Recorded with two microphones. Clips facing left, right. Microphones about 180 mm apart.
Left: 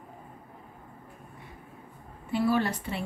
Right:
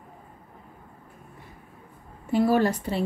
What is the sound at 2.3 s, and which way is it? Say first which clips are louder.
Speech: right 5 dB; 45° right (ahead or behind).